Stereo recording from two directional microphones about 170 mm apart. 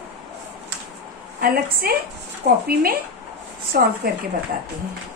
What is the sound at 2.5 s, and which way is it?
Speech, 85° right.